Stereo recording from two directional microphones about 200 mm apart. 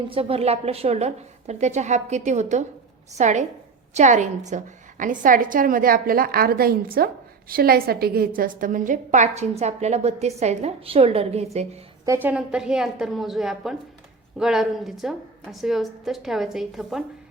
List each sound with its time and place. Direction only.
0.1 s a woman's voice: 30° right (ahead or behind)
12.0 s a woman's voice: 10° right (ahead or behind)